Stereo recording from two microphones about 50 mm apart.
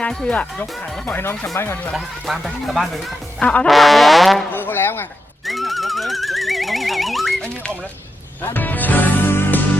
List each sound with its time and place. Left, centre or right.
0.0 s speech: centre
0.3 s speech: left
1.6 s speech: left
2.0 s speech: centre
3.4 s brass instrument: left
3.7 s speech: centre
4.5 s speech: left
5.5 s music: centre
8.4 s music: left